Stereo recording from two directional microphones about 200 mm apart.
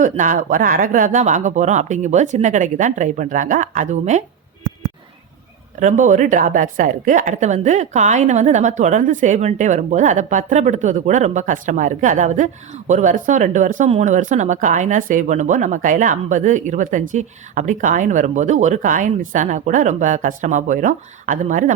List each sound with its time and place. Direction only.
0.0 s a woman's voice: 40° right (ahead or behind)
5.8 s a woman's voice: 40° right (ahead or behind)